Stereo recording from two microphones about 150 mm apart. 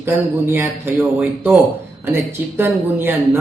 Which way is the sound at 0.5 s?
15° right (ahead or behind).